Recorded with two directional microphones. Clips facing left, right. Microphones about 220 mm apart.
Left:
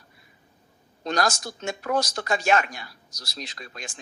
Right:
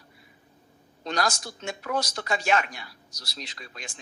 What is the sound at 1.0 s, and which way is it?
A woman's voice, 45° left (ahead or behind).